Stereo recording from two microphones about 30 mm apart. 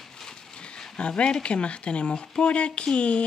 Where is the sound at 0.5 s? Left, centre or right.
Left.